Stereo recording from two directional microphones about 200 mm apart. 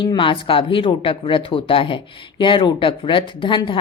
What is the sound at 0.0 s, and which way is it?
Speech, 25° left (ahead or behind).